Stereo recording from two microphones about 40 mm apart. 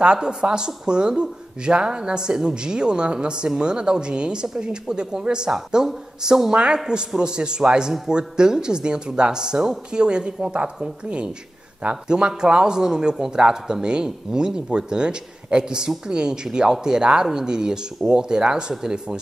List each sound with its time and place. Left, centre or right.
0.0 s speech: centre